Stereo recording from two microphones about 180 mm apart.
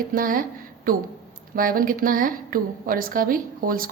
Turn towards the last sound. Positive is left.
turn(degrees=-50)  # may be behind; listen again after turning